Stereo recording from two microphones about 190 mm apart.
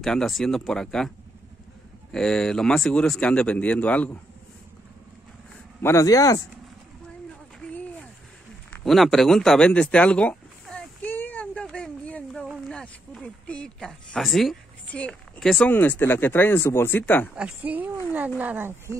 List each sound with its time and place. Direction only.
0.0 s speech: centre (ahead or behind)
2.1 s speech: 5° left (ahead or behind)
5.8 s speech: 15° left (ahead or behind)
8.8 s a sound: centre (ahead or behind)
12.6 s speech: 5° left (ahead or behind)
17.4 s speech: 5° right (ahead or behind)